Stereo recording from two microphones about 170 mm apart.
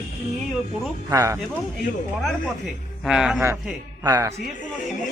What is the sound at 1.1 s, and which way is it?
Speech, 20° right (ahead or behind).